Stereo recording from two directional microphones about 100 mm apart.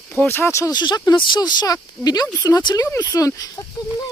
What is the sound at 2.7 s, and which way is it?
Speech, 30° left (ahead or behind).